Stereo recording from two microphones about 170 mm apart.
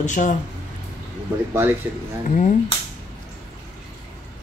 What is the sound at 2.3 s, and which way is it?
Speech, 45° left (ahead or behind).